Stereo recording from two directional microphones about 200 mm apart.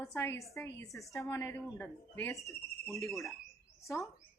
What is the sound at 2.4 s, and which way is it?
Speech, centre (ahead or behind).